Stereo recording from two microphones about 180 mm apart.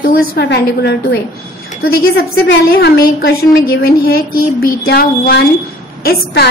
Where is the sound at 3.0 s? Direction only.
55° left (ahead or behind).